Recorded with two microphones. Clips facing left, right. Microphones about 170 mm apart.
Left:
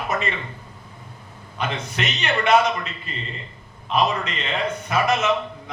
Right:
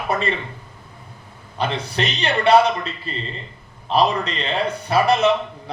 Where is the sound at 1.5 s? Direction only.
35° right (ahead or behind).